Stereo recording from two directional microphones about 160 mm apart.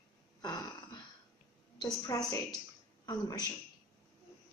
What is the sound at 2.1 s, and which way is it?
A woman's voice, 20° left (ahead or behind).